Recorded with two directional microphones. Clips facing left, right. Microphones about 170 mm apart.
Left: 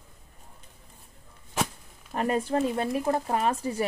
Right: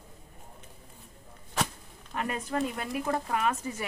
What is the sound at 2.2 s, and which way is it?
Speech, 35° left (ahead or behind).